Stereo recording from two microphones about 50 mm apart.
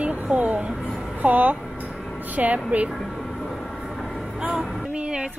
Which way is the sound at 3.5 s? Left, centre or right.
Centre.